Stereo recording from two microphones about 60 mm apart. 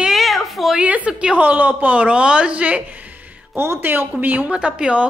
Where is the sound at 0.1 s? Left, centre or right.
Centre.